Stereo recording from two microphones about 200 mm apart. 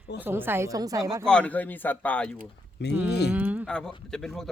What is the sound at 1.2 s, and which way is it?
Speech, 5° left (ahead or behind).